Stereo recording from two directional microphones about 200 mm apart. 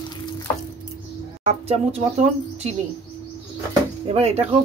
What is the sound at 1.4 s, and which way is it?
Speech, 35° right (ahead or behind).